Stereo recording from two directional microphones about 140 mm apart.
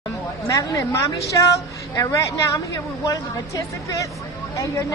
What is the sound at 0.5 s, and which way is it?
Speech, 25° left (ahead or behind).